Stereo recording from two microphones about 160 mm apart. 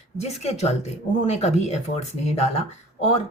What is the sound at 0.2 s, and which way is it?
A woman's voice, 40° left (ahead or behind).